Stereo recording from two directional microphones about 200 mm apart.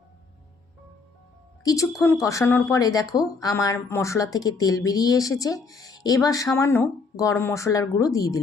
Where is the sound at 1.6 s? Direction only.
15° left (ahead or behind).